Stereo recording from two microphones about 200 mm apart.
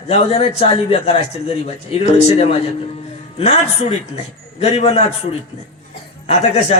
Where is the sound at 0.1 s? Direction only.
30° left (ahead or behind).